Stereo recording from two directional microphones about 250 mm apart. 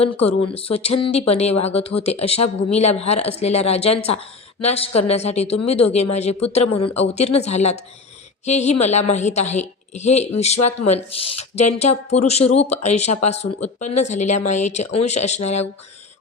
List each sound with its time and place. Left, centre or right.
0.0 s speech: left